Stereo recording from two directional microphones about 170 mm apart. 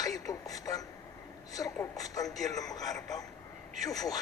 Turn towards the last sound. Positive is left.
turn(degrees=20)  # may be behind; listen again after turning